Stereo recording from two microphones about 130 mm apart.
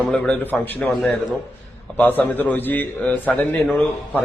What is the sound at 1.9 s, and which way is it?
A man's voice, 15° left (ahead or behind).